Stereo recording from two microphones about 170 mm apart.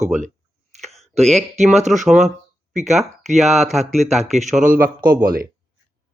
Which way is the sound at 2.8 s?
40° right (ahead or behind).